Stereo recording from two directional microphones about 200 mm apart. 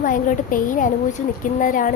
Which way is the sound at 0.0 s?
40° left (ahead or behind).